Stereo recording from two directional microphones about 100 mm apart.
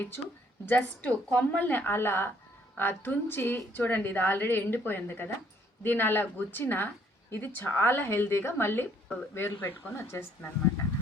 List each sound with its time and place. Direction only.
0.6 s a woman's voice: 15° left (ahead or behind)